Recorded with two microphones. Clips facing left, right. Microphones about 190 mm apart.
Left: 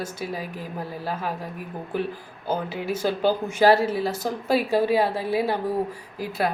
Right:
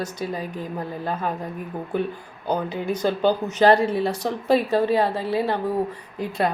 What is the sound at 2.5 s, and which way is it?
Speech, 5° left (ahead or behind).